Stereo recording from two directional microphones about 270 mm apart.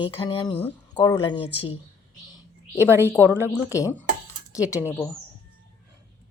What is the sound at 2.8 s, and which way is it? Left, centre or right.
Speech, centre.